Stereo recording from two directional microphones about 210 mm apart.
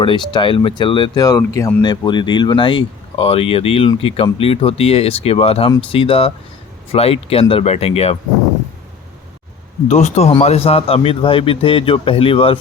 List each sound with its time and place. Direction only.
0.0 s speech: 25° left (ahead or behind)
9.9 s speech: 30° left (ahead or behind)